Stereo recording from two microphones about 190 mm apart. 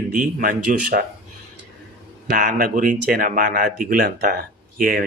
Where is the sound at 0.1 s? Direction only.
45° right (ahead or behind).